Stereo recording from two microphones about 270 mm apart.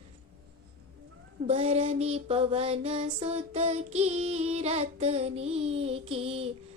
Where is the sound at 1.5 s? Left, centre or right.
Right.